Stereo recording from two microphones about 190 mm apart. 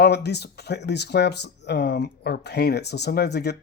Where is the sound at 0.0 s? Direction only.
60° left (ahead or behind).